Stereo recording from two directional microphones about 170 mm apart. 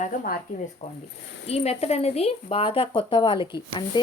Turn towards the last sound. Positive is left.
turn(degrees=25)  # may be behind; listen again after turning